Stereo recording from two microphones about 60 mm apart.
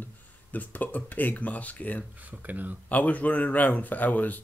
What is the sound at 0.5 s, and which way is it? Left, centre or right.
Speech, left.